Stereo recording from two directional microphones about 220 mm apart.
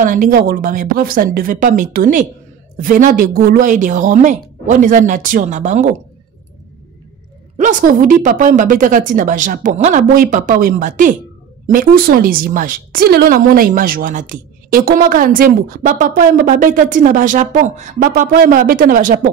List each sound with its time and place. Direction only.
0.0 s speech: 35° right (ahead or behind)
7.5 s speech: 35° right (ahead or behind)